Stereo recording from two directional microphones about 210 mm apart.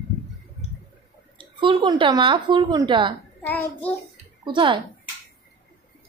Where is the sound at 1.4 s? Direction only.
25° right (ahead or behind).